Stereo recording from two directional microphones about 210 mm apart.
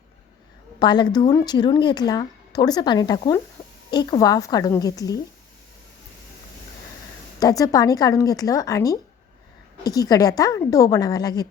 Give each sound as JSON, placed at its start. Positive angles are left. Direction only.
{"t": 0.8, "sound": "a woman's voice", "side_deg": 20}
{"t": 7.3, "sound": "a woman's voice", "side_deg": 15}